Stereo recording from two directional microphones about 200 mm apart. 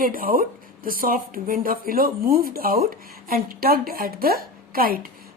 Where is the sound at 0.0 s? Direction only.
45° right (ahead or behind).